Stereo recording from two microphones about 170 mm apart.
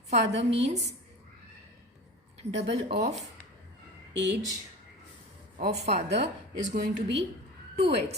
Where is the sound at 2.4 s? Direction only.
90° right.